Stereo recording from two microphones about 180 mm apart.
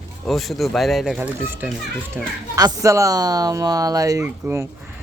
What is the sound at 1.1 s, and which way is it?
A child's voice, 10° right (ahead or behind).